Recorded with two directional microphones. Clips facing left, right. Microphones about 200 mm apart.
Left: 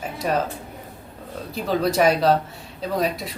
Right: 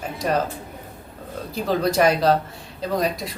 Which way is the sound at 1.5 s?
Centre (ahead or behind).